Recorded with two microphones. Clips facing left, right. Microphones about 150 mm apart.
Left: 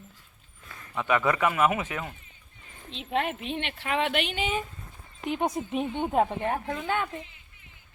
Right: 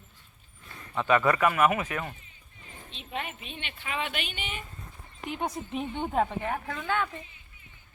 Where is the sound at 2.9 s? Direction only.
80° left.